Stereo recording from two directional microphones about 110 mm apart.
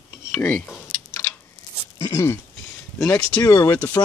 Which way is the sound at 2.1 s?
25° left (ahead or behind).